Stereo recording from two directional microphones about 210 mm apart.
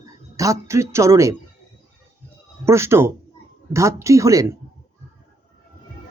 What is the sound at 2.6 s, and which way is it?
Speech, 15° right (ahead or behind).